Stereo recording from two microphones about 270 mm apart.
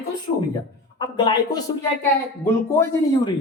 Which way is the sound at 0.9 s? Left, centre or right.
Centre.